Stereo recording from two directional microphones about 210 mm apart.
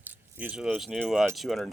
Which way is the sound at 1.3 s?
Centre (ahead or behind).